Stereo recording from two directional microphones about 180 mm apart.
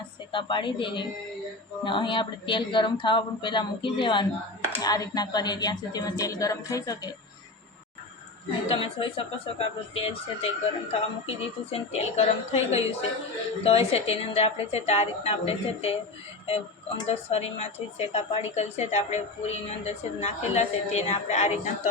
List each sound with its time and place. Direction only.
0.3 s speech: 25° left (ahead or behind)
8.6 s a woman's voice: 30° left (ahead or behind)
17.1 s a woman's voice: 35° left (ahead or behind)